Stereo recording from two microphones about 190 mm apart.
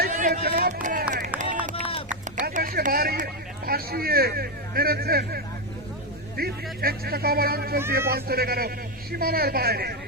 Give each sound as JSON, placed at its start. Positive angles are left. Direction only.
{"t": 0.0, "sound": "run", "side_deg": -40}
{"t": 0.4, "sound": "speech", "side_deg": -50}
{"t": 1.7, "sound": "run", "side_deg": 30}
{"t": 2.3, "sound": "a sound", "side_deg": -45}
{"t": 3.7, "sound": "a man's voice", "side_deg": -50}